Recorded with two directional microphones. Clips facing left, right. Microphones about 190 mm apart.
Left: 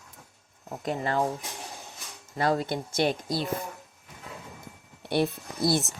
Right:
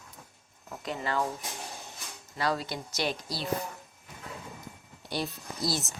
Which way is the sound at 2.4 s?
55° left (ahead or behind).